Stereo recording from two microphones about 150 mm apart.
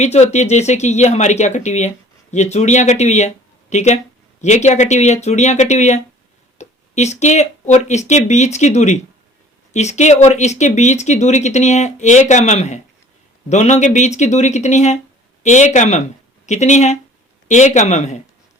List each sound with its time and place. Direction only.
0.0 s speech: 50° left (ahead or behind)